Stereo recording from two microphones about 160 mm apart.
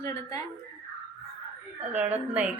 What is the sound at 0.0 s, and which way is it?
Speech, 20° left (ahead or behind).